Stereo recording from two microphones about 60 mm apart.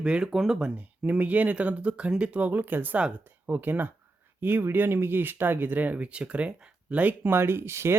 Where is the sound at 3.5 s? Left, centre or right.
Right.